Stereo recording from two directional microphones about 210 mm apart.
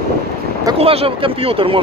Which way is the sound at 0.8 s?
30° right (ahead or behind).